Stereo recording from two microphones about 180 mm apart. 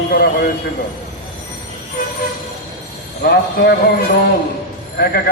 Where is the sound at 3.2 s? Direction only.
65° left (ahead or behind).